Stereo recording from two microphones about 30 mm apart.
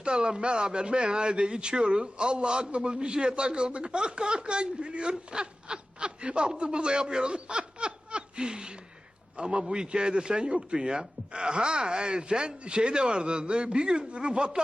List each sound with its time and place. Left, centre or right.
0.0 s a man's voice: right